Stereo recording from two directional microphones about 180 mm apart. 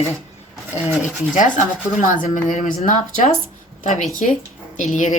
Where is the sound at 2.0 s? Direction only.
45° left (ahead or behind).